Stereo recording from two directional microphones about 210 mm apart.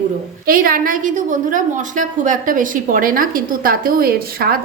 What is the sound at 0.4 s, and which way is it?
A woman's voice, 45° right (ahead or behind).